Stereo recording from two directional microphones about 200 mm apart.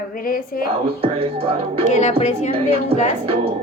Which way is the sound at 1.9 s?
35° left (ahead or behind).